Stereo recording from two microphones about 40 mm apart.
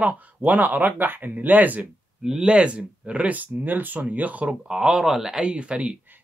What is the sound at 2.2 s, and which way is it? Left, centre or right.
Speech, centre.